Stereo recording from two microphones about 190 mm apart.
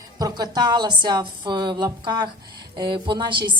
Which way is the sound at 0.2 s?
20° right (ahead or behind).